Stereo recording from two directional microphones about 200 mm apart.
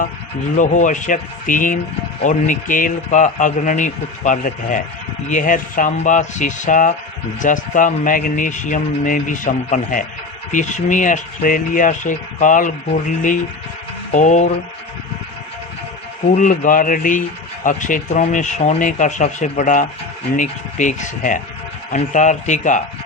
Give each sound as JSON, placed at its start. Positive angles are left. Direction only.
{"t": 0.5, "sound": "speech", "side_deg": 40}
{"t": 16.3, "sound": "speech", "side_deg": 40}